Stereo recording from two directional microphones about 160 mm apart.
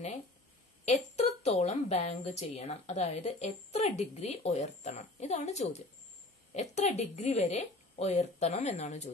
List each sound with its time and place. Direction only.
0.8 s a woman's voice: 45° left (ahead or behind)